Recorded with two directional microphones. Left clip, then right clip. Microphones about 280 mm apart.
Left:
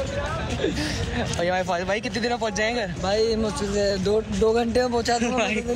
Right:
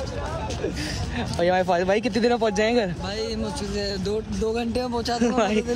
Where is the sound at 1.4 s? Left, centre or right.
Right.